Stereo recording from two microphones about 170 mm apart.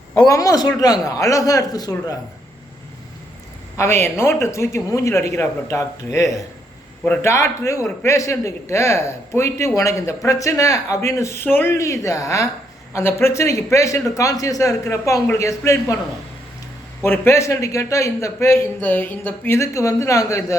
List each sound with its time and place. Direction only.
0.3 s a man's voice: 20° left (ahead or behind)
3.8 s a man's voice: 15° left (ahead or behind)
17.0 s a man's voice: 15° left (ahead or behind)